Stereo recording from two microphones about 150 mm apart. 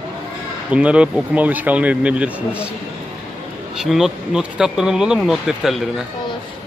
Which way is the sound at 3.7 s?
Centre (ahead or behind).